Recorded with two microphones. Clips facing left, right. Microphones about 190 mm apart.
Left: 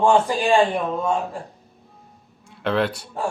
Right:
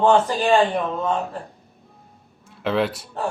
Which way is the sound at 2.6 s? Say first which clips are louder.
Even; centre (ahead or behind).